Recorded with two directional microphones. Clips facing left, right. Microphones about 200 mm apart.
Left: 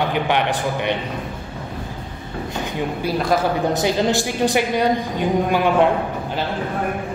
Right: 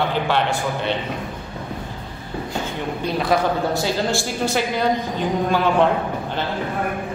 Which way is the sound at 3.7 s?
20° left (ahead or behind).